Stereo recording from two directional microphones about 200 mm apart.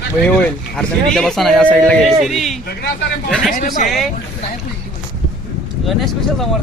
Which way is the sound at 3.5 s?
40° left (ahead or behind).